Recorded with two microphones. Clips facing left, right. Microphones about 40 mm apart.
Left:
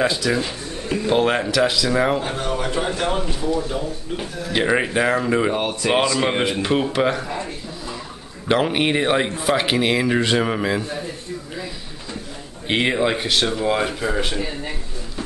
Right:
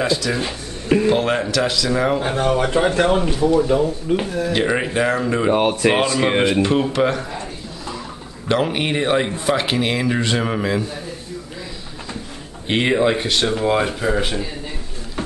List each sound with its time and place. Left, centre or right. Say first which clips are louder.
0.0 s speech: even; centre
0.5 s music: right 6 dB; right
1.1 s speech: even; centre
2.2 s speech: right 5 dB; right
4.5 s speech: left 2 dB; centre
5.6 s speech: right 5 dB; right
6.1 s speech: right 3 dB; centre
6.6 s speech: right 2 dB; centre
8.5 s speech: left 1 dB; centre
12.6 s speech: right 2 dB; centre